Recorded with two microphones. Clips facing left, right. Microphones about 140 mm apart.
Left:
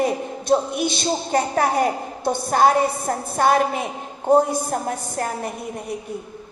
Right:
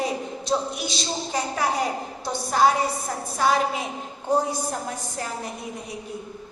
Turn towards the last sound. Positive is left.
turn(degrees=55)  # may be behind; listen again after turning